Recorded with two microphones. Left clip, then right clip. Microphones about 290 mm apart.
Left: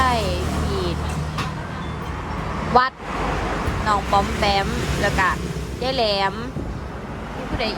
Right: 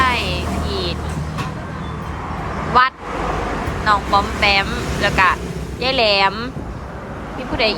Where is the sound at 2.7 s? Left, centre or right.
Centre.